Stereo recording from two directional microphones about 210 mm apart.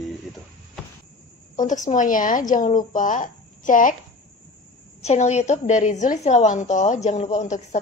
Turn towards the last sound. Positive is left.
turn(degrees=35)  # may be behind; listen again after turning